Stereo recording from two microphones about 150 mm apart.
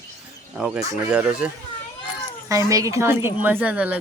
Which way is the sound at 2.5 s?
20° right (ahead or behind).